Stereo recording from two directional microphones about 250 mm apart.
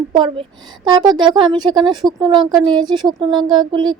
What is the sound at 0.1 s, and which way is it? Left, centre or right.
Speech, centre.